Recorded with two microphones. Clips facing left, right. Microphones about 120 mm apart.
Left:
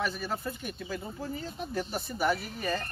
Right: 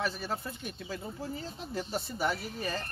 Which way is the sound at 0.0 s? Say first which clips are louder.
Left 2 dB; 30° right (ahead or behind).